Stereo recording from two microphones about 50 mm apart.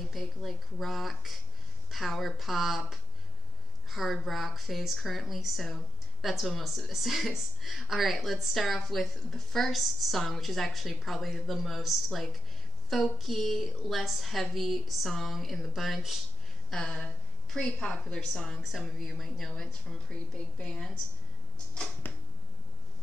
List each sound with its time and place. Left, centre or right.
0.0 s a woman's voice: centre
16.7 s a woman's voice: centre
18.0 s a woman's voice: centre
18.6 s a woman's voice: centre
20.5 s a woman's voice: centre